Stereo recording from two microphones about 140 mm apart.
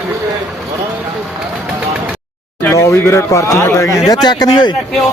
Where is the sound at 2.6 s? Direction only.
20° left (ahead or behind).